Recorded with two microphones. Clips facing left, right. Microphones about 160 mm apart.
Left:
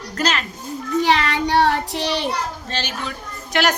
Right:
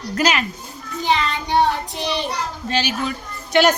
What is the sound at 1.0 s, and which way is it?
Child singing, 70° left (ahead or behind).